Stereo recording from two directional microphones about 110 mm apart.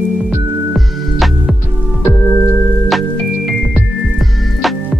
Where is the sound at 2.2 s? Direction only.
20° left (ahead or behind).